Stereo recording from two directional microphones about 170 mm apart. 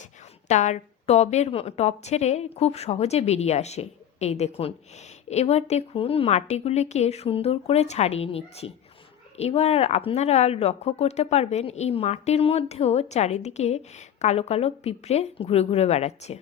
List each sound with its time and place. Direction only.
0.0 s speech: 45° left (ahead or behind)